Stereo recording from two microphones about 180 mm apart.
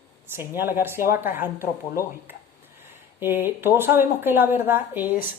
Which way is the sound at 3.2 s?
10° right (ahead or behind).